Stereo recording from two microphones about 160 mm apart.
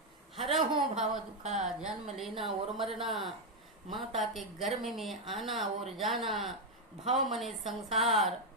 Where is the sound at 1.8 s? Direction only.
Centre (ahead or behind).